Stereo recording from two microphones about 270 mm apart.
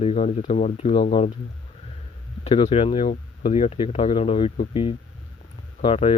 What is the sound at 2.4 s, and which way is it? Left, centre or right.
Speech, left.